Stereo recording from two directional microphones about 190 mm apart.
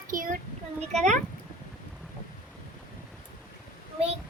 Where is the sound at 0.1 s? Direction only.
45° right (ahead or behind).